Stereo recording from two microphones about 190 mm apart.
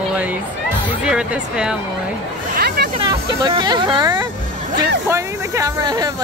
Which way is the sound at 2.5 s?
55° right (ahead or behind).